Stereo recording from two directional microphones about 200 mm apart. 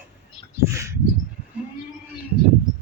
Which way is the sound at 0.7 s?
15° right (ahead or behind).